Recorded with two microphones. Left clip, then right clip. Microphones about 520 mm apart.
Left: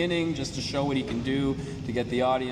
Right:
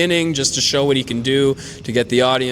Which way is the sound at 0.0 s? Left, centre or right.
Right.